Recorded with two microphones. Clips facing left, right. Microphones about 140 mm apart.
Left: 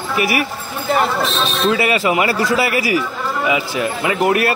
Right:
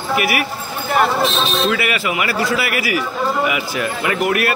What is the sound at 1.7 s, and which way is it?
Speech, 35° left (ahead or behind).